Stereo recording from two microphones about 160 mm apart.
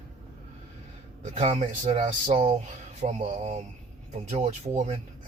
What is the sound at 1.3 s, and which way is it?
Speech, 45° right (ahead or behind).